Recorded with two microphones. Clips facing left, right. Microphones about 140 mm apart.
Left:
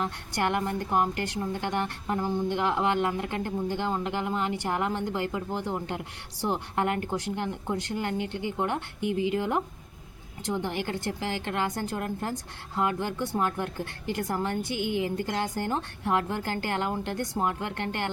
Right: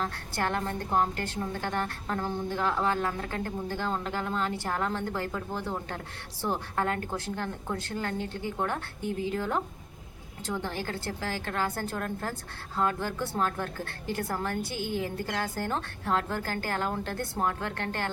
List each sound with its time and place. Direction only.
0.0 s a woman's voice: 15° left (ahead or behind)